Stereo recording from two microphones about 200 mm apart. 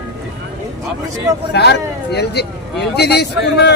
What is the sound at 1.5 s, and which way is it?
Speech, 55° left (ahead or behind).